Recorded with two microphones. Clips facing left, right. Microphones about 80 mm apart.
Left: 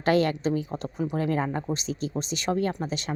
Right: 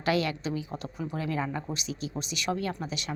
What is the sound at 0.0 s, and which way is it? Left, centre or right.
A woman's voice, left.